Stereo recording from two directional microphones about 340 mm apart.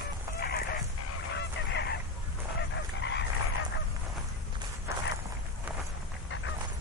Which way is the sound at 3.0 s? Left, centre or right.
Left.